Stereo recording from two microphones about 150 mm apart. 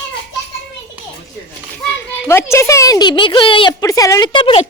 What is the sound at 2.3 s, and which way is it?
A woman's voice, 15° left (ahead or behind).